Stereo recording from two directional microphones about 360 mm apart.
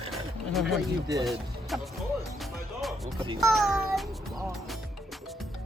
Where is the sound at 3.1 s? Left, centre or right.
Centre.